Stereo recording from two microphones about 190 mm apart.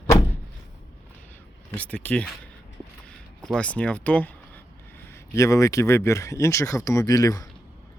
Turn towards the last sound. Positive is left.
turn(degrees=20)  # may be behind; listen again after turning